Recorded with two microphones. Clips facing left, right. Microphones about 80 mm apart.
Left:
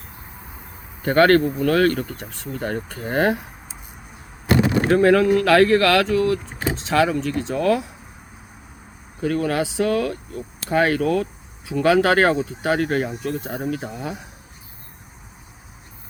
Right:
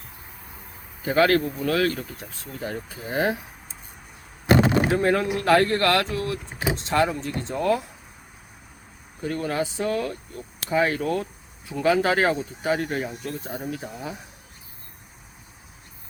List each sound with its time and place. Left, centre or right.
1.0 s speech: left
4.9 s speech: left
9.2 s speech: left